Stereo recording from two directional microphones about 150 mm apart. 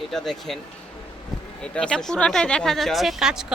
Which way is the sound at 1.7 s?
5° left (ahead or behind).